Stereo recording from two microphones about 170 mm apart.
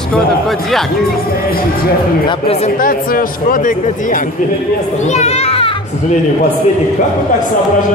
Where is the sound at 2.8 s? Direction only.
55° left (ahead or behind); by 6.1 s 35° left (ahead or behind).